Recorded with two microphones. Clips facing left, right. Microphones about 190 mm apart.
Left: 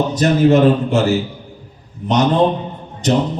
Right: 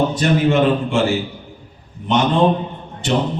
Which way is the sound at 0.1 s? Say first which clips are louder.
Left 4 dB; 40° left (ahead or behind).